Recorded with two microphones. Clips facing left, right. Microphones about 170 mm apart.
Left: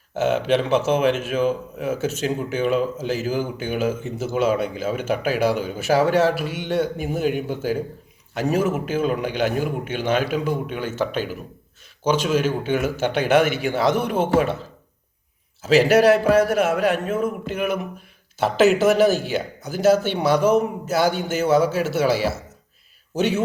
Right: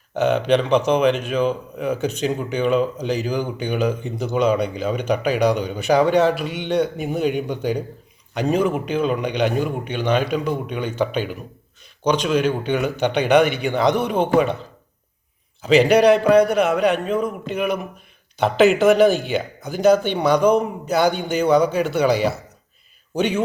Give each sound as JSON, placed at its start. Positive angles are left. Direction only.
{"t": 0.2, "sound": "speech", "side_deg": 5}
{"t": 6.4, "sound": "a man's voice", "side_deg": -65}
{"t": 7.0, "sound": "speech", "side_deg": 5}
{"t": 15.6, "sound": "speech", "side_deg": 5}